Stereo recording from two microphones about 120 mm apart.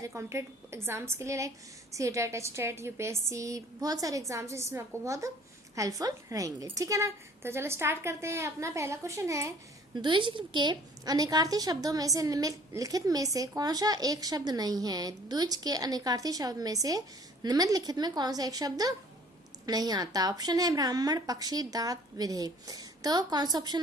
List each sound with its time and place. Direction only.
0.0 s a woman's voice: 25° right (ahead or behind)
9.9 s a woman's voice: 40° right (ahead or behind)